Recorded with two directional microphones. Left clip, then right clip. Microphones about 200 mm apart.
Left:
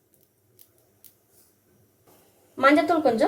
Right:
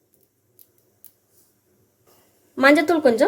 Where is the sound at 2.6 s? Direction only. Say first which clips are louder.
Right 3 dB; 45° right (ahead or behind).